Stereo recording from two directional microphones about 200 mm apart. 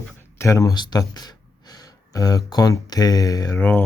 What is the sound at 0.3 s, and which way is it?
Speech, 15° left (ahead or behind).